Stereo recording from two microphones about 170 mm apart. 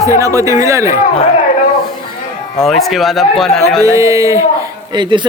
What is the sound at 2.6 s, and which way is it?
Speech, centre (ahead or behind).